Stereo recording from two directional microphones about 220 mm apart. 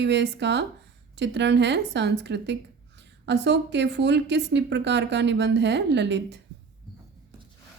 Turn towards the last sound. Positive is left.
turn(degrees=-50)  # may be behind; listen again after turning